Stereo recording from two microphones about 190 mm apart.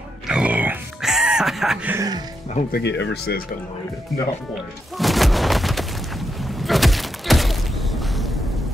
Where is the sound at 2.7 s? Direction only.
65° left (ahead or behind).